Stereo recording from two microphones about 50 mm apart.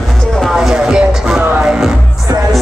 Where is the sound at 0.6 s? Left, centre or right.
Centre.